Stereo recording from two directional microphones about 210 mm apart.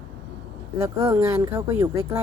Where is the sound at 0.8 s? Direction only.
15° right (ahead or behind).